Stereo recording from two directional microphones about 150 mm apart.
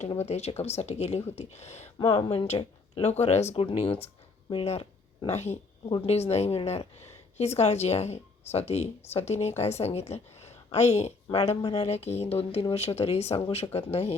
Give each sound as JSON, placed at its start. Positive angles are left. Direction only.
{"t": 0.2, "sound": "speech", "side_deg": 45}
{"t": 2.0, "sound": "speech", "side_deg": 30}
{"t": 2.3, "sound": "speech", "side_deg": 40}